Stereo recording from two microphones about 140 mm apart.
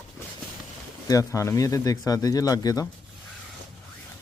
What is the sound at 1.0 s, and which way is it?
Speech, 25° left (ahead or behind).